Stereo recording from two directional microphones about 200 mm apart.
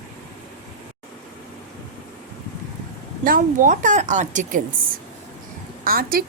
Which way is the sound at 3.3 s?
45° right (ahead or behind).